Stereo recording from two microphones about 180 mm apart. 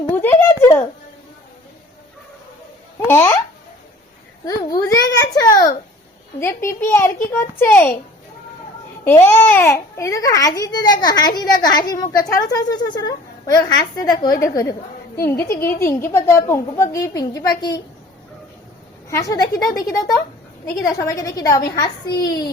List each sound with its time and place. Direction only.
0.1 s a sound: 10° left (ahead or behind)
3.1 s a woman's voice: 10° left (ahead or behind)
4.4 s a sound: 20° left (ahead or behind)
6.4 s a woman's voice: 15° left (ahead or behind)
9.0 s a child's voice: 10° left (ahead or behind)
19.1 s a child's voice: 20° left (ahead or behind)